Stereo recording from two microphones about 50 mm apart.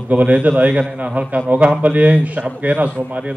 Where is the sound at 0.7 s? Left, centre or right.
Centre.